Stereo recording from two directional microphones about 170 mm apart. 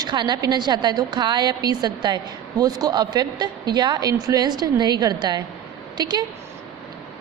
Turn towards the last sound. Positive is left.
turn(degrees=-25)  # may be behind; listen again after turning